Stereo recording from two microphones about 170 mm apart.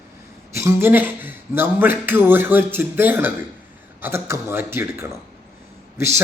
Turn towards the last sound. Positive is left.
turn(degrees=-15)  # may be behind; listen again after turning